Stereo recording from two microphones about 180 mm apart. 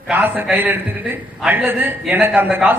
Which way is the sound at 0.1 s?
10° right (ahead or behind).